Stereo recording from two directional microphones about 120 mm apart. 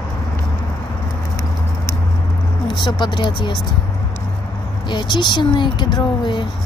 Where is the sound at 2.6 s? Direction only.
40° left (ahead or behind).